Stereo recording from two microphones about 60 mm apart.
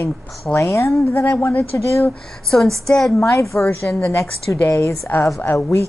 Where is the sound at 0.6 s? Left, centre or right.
Left.